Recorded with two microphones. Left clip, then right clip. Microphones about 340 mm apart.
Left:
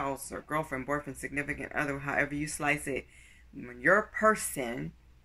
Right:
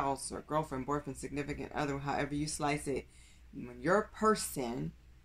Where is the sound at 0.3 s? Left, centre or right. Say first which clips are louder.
Left 2 dB; centre.